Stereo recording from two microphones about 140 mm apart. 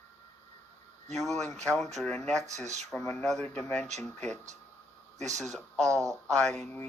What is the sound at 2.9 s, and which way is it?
Speech, 5° left (ahead or behind).